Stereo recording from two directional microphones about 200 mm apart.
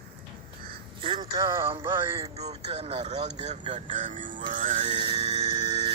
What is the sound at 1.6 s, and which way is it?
Music, 25° right (ahead or behind).